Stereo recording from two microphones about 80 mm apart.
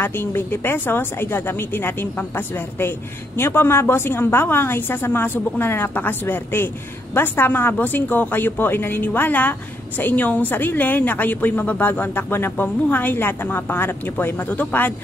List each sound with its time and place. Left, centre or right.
0.0 s speech: left